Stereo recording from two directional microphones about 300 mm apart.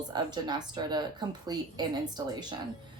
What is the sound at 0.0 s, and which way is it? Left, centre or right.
A woman's voice, centre.